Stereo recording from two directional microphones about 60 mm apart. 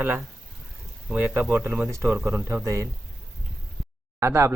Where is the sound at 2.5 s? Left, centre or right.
Right.